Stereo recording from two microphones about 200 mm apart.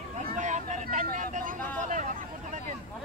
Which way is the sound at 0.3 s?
35° right (ahead or behind).